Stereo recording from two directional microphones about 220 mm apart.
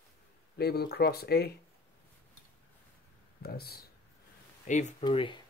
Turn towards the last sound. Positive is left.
turn(degrees=20)  # may be behind; listen again after turning